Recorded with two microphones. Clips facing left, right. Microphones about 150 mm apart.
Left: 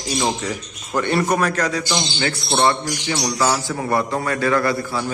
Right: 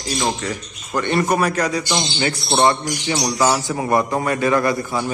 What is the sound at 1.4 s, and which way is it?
A man's voice, 10° right (ahead or behind).